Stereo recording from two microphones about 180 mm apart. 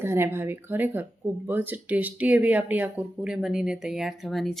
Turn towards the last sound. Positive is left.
turn(degrees=0)  # may be behind; listen again after turning